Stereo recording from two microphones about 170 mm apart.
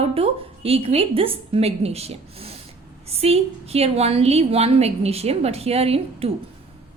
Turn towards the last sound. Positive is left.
turn(degrees=-35)  # may be behind; listen again after turning